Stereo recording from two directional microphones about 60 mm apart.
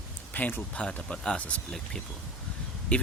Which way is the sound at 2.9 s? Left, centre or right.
Left.